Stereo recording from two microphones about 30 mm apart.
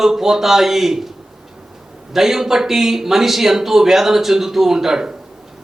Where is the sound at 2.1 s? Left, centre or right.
Centre.